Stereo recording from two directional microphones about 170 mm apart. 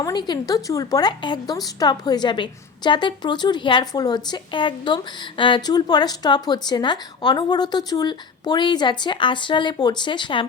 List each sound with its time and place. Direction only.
0.0 s a woman's voice: 25° left (ahead or behind)